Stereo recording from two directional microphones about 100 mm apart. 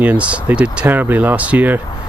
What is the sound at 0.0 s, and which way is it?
Speech, 15° right (ahead or behind).